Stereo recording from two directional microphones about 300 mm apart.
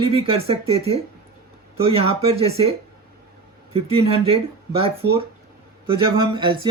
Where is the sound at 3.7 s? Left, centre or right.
Centre.